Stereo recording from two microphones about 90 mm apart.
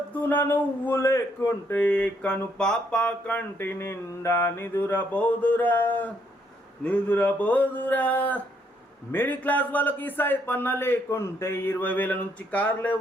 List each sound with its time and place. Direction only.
0.1 s a man's voice: 20° left (ahead or behind)
1.7 s a sound: 20° left (ahead or behind)
3.6 s a man's voice: 25° left (ahead or behind)